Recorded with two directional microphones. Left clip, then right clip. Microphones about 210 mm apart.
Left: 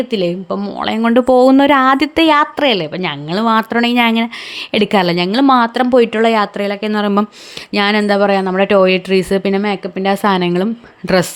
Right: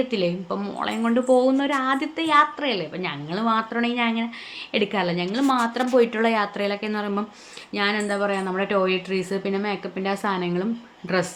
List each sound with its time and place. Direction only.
0.1 s speech: 40° left (ahead or behind)